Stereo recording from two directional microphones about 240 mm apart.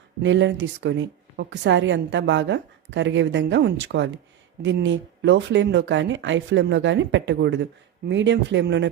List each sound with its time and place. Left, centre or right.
0.2 s speech: right